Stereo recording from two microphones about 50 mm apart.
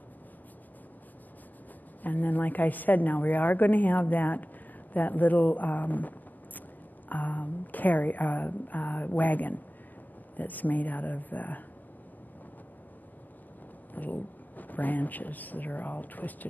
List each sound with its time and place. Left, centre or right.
2.0 s a woman's voice: left
13.9 s speech: left